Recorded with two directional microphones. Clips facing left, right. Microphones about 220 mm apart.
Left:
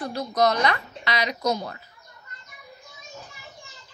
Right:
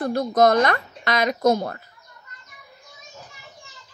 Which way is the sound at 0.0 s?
50° right (ahead or behind).